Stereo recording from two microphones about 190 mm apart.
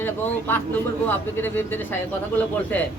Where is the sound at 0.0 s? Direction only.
10° left (ahead or behind).